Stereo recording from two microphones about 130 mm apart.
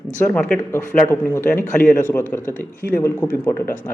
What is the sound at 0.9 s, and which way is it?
Speech, 15° left (ahead or behind).